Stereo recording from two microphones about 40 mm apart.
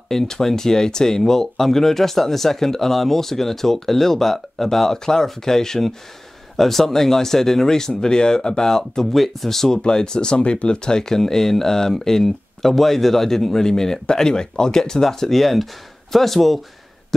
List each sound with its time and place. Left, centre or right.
0.1 s speech: centre
9.0 s speech: centre
9.8 s speech: left; by 16.5 s centre